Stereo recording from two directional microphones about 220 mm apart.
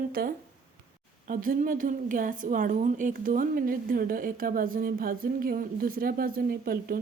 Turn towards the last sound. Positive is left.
turn(degrees=-40)  # may be behind; listen again after turning